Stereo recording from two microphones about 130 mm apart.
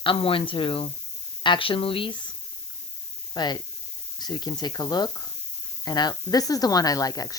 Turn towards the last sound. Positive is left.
turn(degrees=30)  # may be behind; listen again after turning